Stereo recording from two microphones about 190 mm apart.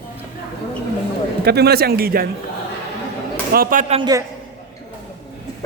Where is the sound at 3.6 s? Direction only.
45° right (ahead or behind).